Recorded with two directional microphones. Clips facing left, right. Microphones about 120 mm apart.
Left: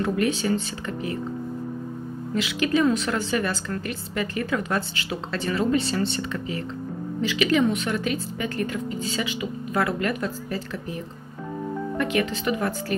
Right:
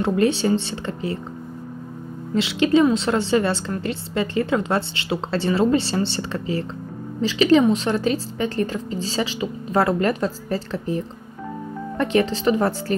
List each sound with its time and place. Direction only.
0.0 s a woman's voice: 30° right (ahead or behind)
2.3 s a woman's voice: 25° right (ahead or behind)
12.0 s a woman's voice: 35° right (ahead or behind)